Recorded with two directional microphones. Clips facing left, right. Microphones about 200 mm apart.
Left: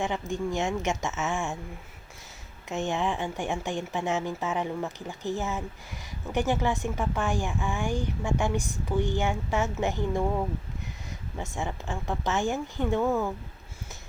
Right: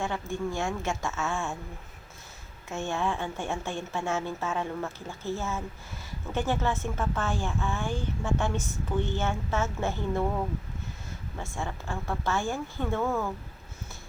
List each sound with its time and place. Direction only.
0.0 s speech: 15° left (ahead or behind)
2.6 s speech: 15° left (ahead or behind)